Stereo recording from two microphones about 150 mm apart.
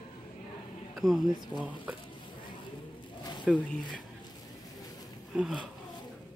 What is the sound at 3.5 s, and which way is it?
Speech, centre (ahead or behind).